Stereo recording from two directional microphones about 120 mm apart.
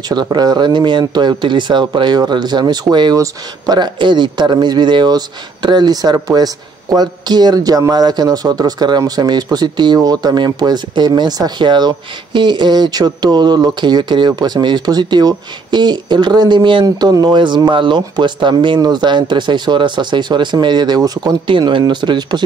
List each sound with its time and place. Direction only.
0.1 s speech: 35° right (ahead or behind)
16.8 s speech: 30° right (ahead or behind)